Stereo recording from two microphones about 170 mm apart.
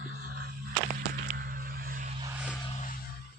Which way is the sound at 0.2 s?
60° right (ahead or behind).